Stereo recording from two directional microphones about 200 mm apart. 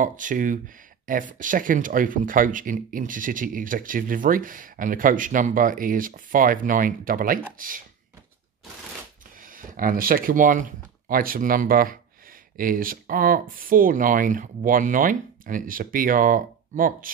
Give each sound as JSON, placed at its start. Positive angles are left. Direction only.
{"t": 0.0, "sound": "speech", "side_deg": -40}
{"t": 9.4, "sound": "speech", "side_deg": -45}